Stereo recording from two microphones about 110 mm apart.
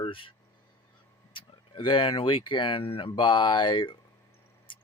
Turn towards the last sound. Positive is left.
turn(degrees=50)  # may be behind; listen again after turning